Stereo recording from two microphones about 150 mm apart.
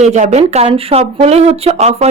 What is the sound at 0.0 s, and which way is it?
Speech, 50° right (ahead or behind).